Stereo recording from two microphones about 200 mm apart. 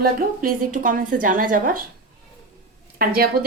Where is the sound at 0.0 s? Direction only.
45° right (ahead or behind).